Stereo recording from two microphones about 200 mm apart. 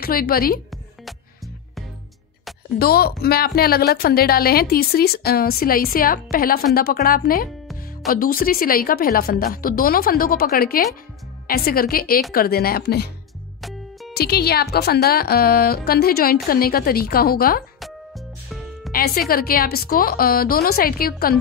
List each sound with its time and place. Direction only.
0.0 s a woman's voice: 50° left (ahead or behind)
2.8 s a woman's voice: 50° left (ahead or behind)
13.6 s music: centre (ahead or behind)
14.1 s a woman's voice: 50° left (ahead or behind)
18.9 s a woman's voice: 50° left (ahead or behind)